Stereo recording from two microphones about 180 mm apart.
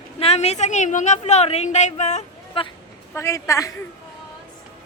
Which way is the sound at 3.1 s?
15° left (ahead or behind).